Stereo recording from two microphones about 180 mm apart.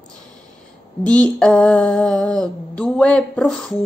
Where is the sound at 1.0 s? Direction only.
5° left (ahead or behind).